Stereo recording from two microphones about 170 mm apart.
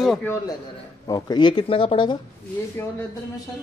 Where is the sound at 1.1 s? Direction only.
25° left (ahead or behind).